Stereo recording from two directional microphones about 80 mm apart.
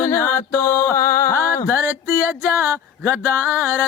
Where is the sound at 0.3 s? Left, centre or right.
Left.